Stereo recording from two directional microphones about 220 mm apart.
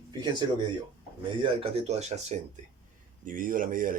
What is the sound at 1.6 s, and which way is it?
Speech, 30° right (ahead or behind).